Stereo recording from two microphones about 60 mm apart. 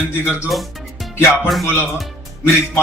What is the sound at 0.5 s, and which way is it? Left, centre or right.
Music, centre.